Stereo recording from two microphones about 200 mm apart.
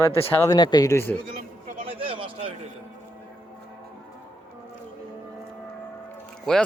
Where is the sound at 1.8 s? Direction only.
25° right (ahead or behind).